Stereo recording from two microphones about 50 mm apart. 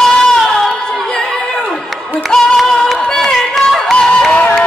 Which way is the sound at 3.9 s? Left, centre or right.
Centre.